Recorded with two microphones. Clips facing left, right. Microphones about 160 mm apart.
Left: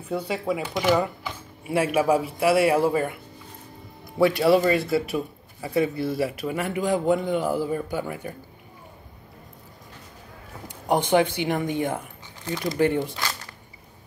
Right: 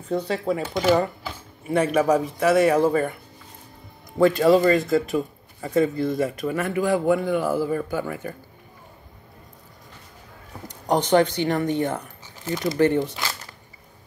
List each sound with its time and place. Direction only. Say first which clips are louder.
0.1 s a man's voice: right 2 dB; 10° left (ahead or behind)
4.2 s a man's voice: right 2 dB; 10° left (ahead or behind)
6.5 s a man's voice: right 3 dB; 15° left (ahead or behind)
10.9 s a man's voice: right 2 dB; 10° left (ahead or behind)
12.4 s speech: right 3 dB; 5° right (ahead or behind)
12.7 s a man's voice: right 2 dB; 10° left (ahead or behind)